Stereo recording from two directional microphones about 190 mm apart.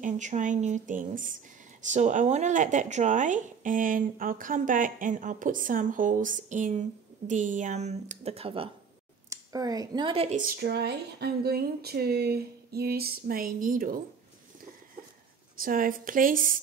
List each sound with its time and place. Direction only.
0.0 s a woman's voice: 40° right (ahead or behind)
9.3 s speech: 20° right (ahead or behind)
10.4 s speech: 60° right (ahead or behind)
15.6 s speech: 45° right (ahead or behind)